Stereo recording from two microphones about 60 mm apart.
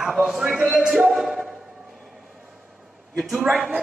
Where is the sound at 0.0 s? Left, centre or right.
Centre.